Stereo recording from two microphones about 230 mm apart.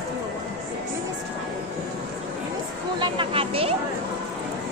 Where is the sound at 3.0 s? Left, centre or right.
Right.